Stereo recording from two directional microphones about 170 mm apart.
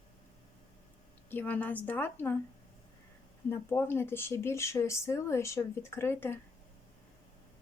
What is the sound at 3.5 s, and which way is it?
Speech, 15° left (ahead or behind).